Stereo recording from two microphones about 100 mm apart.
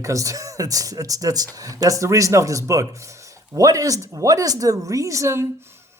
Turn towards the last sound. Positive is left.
turn(degrees=-25)  # may be behind; listen again after turning